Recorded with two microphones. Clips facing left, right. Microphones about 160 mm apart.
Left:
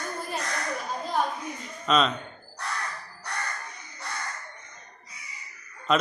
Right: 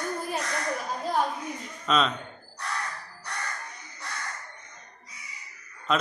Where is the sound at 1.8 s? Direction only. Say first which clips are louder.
Left 2 dB; centre (ahead or behind).